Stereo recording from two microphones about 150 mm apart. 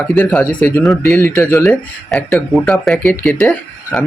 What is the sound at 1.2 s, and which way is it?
Speech, 15° left (ahead or behind).